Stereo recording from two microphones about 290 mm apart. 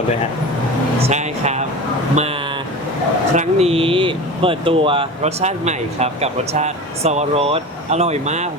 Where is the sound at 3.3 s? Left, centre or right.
Right.